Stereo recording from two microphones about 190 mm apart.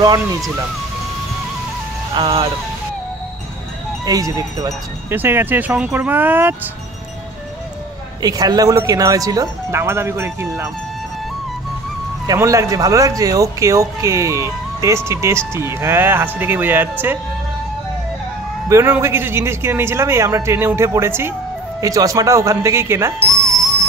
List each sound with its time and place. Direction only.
0.0 s speech: 20° right (ahead or behind)
2.1 s speech: 30° right (ahead or behind)
4.0 s speech: 20° right (ahead or behind)
8.2 s speech: 20° right (ahead or behind)
12.3 s speech: 15° right (ahead or behind)
18.7 s speech: 15° right (ahead or behind)